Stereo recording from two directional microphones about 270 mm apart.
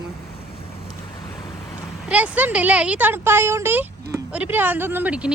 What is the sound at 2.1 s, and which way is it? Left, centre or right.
Speech, centre.